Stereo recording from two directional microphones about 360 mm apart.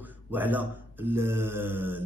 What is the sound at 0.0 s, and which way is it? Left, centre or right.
A man's voice, centre.